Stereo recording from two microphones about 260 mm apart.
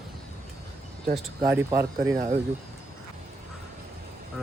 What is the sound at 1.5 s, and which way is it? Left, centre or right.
Speech, centre.